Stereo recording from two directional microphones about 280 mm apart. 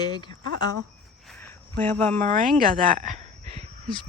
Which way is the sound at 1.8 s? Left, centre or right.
Centre.